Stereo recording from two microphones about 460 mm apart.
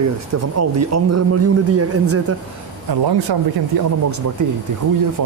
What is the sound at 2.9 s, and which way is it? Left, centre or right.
Speech, right.